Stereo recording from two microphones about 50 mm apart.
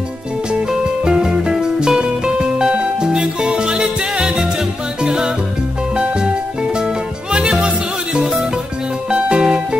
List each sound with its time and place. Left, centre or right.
0.7 s music: centre
7.3 s music: centre